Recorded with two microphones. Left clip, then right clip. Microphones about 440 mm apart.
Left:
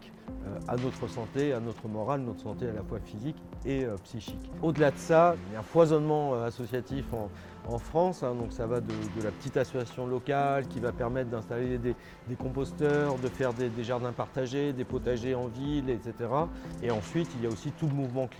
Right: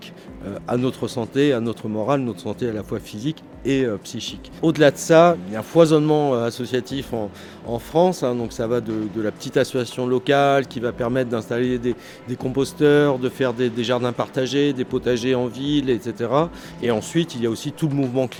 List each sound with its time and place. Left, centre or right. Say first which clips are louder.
0.7 s speech: right 11 dB; left